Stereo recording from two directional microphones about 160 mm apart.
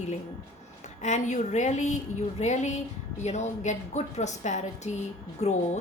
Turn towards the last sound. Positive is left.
turn(degrees=45)  # may be behind; listen again after turning